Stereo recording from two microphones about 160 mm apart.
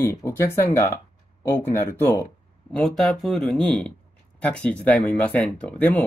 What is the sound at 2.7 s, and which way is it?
Speech, 5° left (ahead or behind).